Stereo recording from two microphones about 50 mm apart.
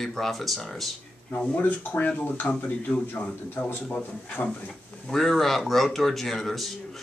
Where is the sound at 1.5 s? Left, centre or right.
Left.